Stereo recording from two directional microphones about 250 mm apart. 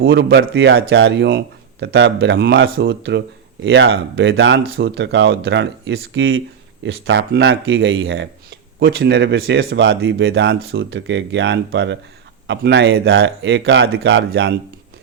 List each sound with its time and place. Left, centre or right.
0.0 s a man's voice: right